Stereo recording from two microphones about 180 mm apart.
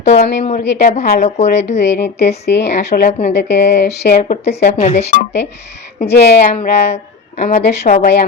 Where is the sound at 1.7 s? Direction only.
70° left (ahead or behind).